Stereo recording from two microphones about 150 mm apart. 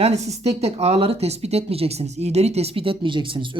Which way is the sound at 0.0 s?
45° right (ahead or behind).